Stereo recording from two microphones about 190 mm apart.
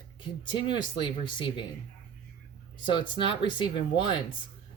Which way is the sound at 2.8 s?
25° left (ahead or behind).